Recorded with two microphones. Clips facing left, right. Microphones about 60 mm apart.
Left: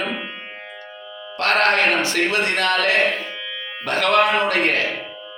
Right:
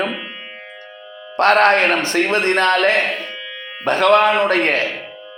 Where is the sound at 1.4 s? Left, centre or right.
Right.